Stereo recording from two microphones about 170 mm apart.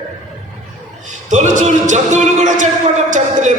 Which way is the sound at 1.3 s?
45° right (ahead or behind).